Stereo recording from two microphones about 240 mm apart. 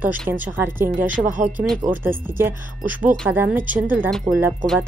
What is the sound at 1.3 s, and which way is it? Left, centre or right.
Speech, right.